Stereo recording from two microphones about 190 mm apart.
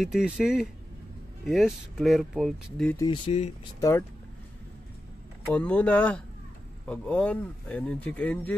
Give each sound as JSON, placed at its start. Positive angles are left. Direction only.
{"t": 0.0, "sound": "speech", "side_deg": 0}
{"t": 3.0, "sound": "speech", "side_deg": 25}
{"t": 5.5, "sound": "speech", "side_deg": 5}